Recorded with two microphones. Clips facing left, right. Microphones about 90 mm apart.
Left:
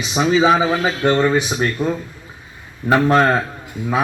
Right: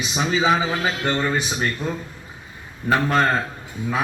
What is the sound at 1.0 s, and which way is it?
A man's voice, 10° left (ahead or behind).